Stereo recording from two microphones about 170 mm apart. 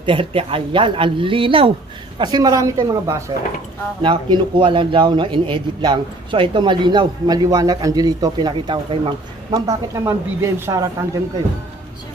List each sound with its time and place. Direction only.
0.0 s a man's voice: 30° right (ahead or behind)
4.0 s a man's voice: 30° right (ahead or behind)